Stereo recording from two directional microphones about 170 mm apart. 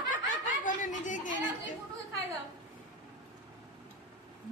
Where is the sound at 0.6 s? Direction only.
50° left (ahead or behind).